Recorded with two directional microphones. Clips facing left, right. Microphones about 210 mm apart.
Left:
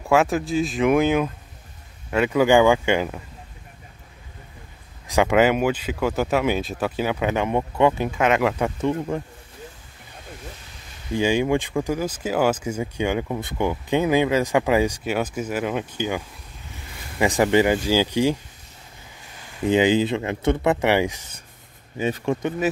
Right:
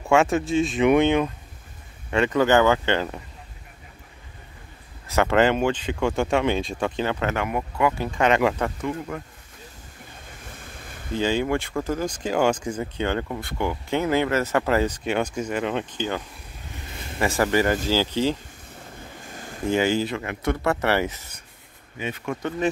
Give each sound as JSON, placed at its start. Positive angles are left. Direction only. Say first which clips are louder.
{"t": 0.0, "sound": "speech", "louder": "even", "side_deg": 0}
{"t": 5.0, "sound": "speech", "louder": "left 2 dB", "side_deg": 15}
{"t": 7.4, "sound": "speech", "louder": "left 6 dB", "side_deg": 25}
{"t": 8.1, "sound": "speech", "louder": "even", "side_deg": 5}
{"t": 9.1, "sound": "speech", "louder": "left 6 dB", "side_deg": 25}
{"t": 11.1, "sound": "speech", "louder": "left 3 dB", "side_deg": 15}
{"t": 19.2, "sound": "a sound", "louder": "right 6 dB", "side_deg": -45}
{"t": 19.6, "sound": "speech", "louder": "left 4 dB", "side_deg": 20}
{"t": 21.9, "sound": "speech", "louder": "left 6 dB", "side_deg": 35}